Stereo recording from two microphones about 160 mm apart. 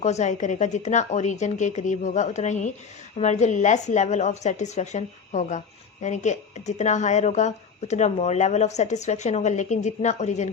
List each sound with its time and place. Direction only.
0.0 s a woman's voice: 45° left (ahead or behind)